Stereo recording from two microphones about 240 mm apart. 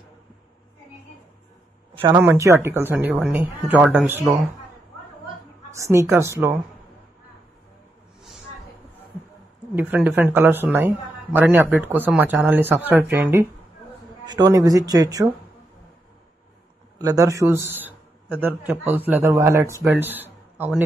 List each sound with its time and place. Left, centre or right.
2.0 s speech: centre
5.8 s speech: centre
9.8 s speech: centre
14.2 s speech: centre
17.0 s speech: centre